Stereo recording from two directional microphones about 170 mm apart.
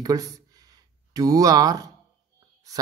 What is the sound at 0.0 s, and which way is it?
Speech, 20° right (ahead or behind).